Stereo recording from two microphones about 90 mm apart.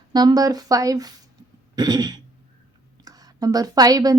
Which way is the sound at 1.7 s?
50° right (ahead or behind).